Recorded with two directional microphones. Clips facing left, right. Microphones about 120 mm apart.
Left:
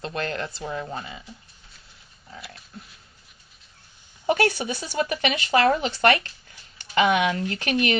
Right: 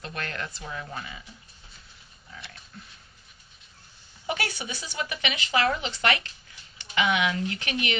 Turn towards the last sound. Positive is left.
turn(degrees=45)  # may be behind; listen again after turning